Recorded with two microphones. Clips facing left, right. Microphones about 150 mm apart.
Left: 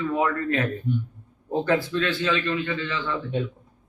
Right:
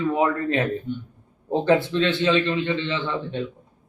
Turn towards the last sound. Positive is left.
turn(degrees=-25)  # may be behind; listen again after turning